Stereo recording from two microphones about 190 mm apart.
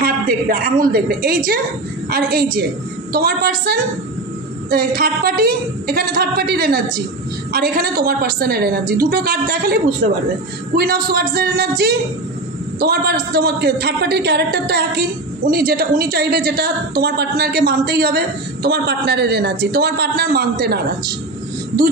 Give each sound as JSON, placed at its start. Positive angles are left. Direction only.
{"t": 0.0, "sound": "a woman's voice", "side_deg": -50}
{"t": 10.8, "sound": "a woman's voice", "side_deg": -50}